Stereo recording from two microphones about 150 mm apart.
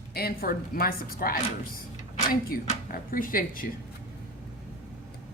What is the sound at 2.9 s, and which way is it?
Speech, 75° left (ahead or behind).